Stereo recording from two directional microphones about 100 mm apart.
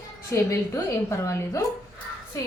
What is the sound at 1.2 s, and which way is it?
Speech, 30° left (ahead or behind).